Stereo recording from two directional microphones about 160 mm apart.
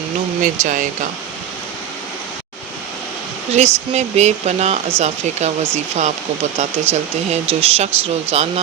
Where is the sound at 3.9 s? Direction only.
45° right (ahead or behind).